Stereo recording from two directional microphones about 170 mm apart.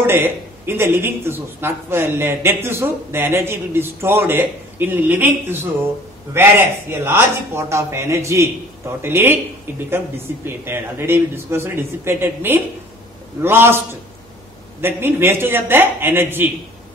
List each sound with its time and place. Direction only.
0.0 s speech: 10° right (ahead or behind)
14.8 s speech: 15° right (ahead or behind)